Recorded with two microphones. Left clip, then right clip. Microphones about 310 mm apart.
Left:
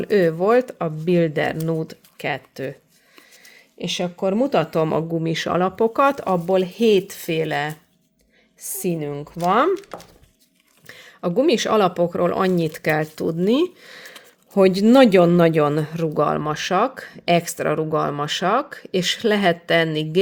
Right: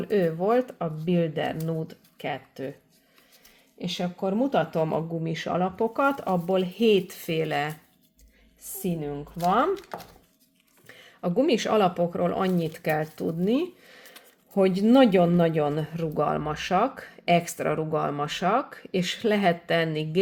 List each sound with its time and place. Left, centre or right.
0.0 s a man's voice: left
3.8 s a man's voice: left
8.8 s a man's voice: left